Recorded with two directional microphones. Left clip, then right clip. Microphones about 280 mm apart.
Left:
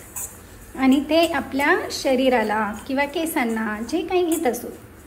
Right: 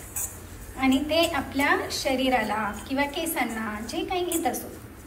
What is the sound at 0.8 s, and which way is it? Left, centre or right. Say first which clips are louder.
A woman's voice: left 5 dB; centre.